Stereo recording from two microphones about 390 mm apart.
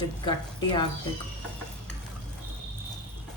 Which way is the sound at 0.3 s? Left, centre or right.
Centre.